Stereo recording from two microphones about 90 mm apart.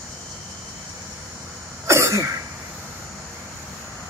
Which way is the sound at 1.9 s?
35° right (ahead or behind).